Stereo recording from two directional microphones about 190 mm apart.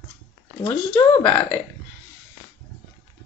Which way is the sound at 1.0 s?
15° left (ahead or behind).